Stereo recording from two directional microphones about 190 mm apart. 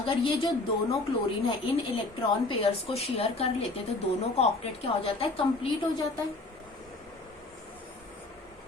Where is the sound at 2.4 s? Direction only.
30° left (ahead or behind).